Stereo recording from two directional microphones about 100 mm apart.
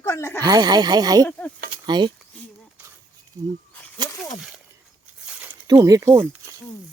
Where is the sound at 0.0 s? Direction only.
30° left (ahead or behind).